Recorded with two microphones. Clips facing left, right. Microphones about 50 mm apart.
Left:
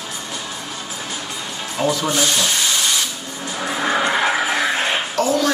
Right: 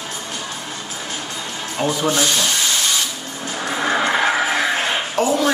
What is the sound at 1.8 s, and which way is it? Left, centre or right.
Speech, centre.